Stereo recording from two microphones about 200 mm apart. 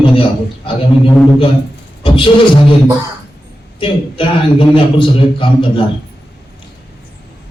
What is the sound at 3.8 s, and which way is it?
A man's voice, 25° left (ahead or behind).